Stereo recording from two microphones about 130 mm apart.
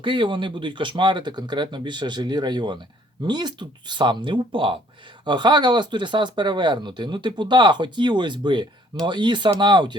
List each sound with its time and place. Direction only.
0.0 s speech: 40° right (ahead or behind)